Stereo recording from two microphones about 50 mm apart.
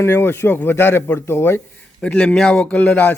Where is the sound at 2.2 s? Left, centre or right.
Centre; by 3.1 s left.